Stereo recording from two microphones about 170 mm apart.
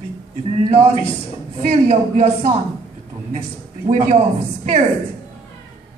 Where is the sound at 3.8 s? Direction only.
40° right (ahead or behind).